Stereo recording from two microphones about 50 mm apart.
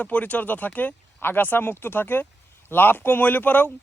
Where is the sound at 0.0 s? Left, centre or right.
Left.